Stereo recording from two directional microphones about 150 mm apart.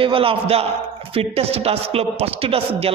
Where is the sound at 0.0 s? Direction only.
35° right (ahead or behind).